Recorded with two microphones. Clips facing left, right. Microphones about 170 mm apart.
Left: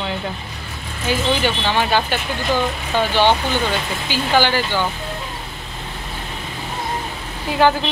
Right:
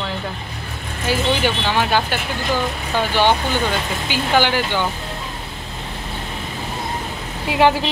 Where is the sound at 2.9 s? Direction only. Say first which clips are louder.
Left 1 dB; 15° right (ahead or behind).